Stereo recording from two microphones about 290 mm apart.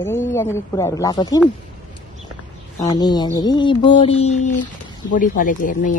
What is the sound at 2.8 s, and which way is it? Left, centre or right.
A man's voice, centre.